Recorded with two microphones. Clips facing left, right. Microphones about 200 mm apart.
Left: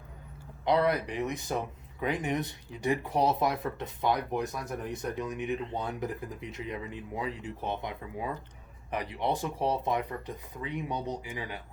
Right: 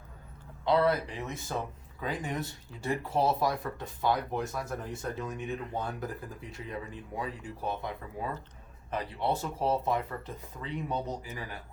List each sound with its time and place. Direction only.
0.6 s speech: 15° left (ahead or behind)